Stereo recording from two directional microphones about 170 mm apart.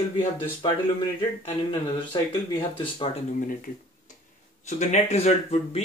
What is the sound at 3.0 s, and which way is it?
Speech, 30° left (ahead or behind).